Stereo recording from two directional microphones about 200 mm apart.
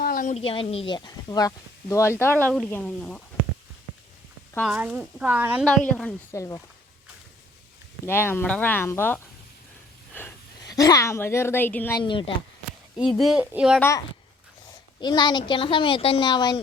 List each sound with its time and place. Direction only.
0.0 s speech: 45° left (ahead or behind); by 3.2 s 5° left (ahead or behind)
4.9 s speech: 5° right (ahead or behind)
6.0 s speech: 10° left (ahead or behind)
8.0 s speech: 10° left (ahead or behind)
10.1 s a sound: 10° left (ahead or behind)
10.6 s speech: 20° left (ahead or behind)
12.0 s a woman's voice: 25° left (ahead or behind)
13.1 s speech: centre (ahead or behind)
13.7 s speech: 10° left (ahead or behind)
15.0 s a woman's voice: 20° left (ahead or behind)